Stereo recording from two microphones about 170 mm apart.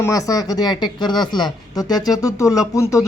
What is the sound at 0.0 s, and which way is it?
Speech, 20° left (ahead or behind).